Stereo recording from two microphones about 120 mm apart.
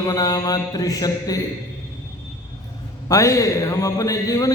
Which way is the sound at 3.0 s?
25° left (ahead or behind).